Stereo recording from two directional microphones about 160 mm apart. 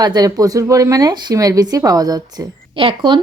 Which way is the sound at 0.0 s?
25° right (ahead or behind).